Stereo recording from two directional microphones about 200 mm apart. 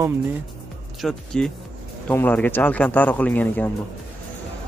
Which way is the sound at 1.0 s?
5° left (ahead or behind).